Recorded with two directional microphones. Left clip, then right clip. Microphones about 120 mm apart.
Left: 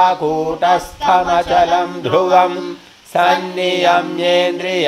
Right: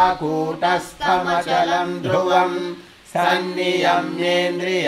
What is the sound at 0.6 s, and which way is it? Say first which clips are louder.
Mantra: left 5 dB; 40° left (ahead or behind).